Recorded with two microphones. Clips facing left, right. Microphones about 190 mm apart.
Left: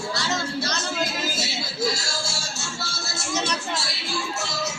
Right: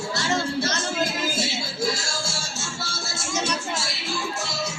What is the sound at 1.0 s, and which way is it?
Music, 50° right (ahead or behind).